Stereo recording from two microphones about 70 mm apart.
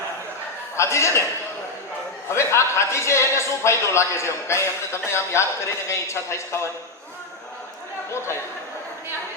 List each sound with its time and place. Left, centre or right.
0.8 s a man's voice: left
2.3 s a man's voice: left